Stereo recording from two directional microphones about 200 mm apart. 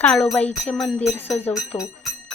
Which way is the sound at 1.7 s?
20° left (ahead or behind).